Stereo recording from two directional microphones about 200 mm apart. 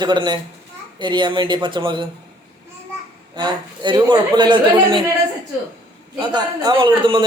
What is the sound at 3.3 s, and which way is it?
A man's voice, 20° right (ahead or behind).